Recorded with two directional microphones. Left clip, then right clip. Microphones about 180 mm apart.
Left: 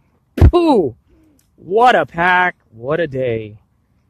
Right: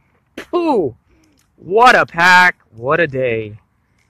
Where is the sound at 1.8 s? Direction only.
10° left (ahead or behind).